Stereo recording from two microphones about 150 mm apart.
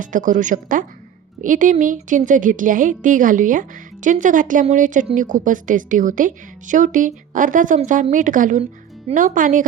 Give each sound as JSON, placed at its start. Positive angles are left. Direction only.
{"t": 0.0, "sound": "a woman's voice", "side_deg": -60}